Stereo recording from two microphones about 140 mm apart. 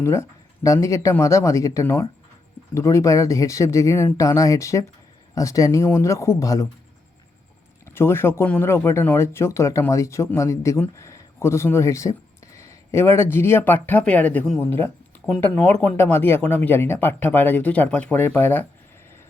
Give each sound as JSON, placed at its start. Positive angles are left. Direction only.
{"t": 0.0, "sound": "speech", "side_deg": 20}
{"t": 7.9, "sound": "speech", "side_deg": 15}